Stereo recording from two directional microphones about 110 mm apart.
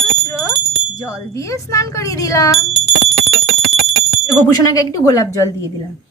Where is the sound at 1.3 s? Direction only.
30° left (ahead or behind).